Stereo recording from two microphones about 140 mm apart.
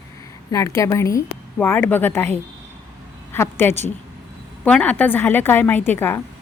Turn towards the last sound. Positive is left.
turn(degrees=15)  # may be behind; listen again after turning